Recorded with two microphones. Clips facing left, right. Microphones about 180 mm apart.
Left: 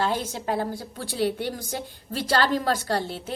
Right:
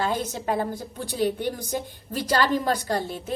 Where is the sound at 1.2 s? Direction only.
45° right (ahead or behind).